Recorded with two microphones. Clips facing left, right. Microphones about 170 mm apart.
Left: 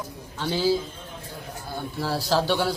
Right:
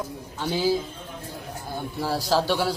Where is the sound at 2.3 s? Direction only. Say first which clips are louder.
Even; 5° right (ahead or behind).